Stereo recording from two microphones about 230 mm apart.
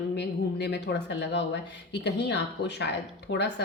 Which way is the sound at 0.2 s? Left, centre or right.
Left.